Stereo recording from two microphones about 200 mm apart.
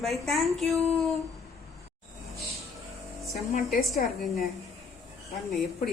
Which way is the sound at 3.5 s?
45° left (ahead or behind).